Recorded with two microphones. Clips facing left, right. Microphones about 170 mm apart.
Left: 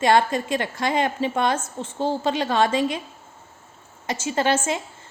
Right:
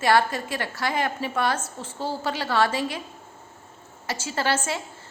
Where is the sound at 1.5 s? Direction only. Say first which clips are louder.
Left 4 dB; 10° right (ahead or behind).